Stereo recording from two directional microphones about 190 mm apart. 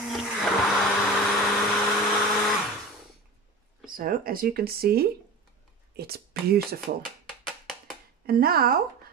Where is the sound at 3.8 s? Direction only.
45° right (ahead or behind).